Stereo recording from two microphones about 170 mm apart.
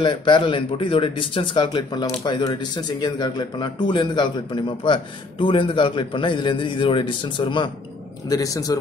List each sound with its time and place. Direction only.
0.0 s a man's voice: 25° left (ahead or behind)